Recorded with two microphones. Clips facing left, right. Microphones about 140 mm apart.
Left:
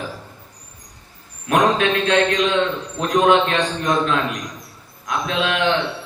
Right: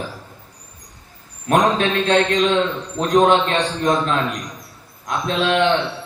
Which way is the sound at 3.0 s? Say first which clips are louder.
Right 1 dB; 35° right (ahead or behind).